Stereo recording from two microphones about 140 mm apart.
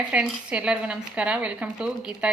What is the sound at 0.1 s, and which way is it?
A woman's voice, 5° right (ahead or behind).